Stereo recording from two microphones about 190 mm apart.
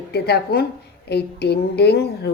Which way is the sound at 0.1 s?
55° left (ahead or behind).